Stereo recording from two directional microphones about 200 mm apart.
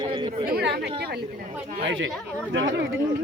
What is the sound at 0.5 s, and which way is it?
Speech, 55° right (ahead or behind).